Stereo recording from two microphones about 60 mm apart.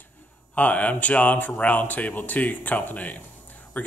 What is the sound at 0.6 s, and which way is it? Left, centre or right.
Speech, left.